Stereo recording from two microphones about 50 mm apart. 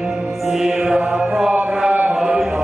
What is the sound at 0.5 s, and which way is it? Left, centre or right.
Mantra, centre.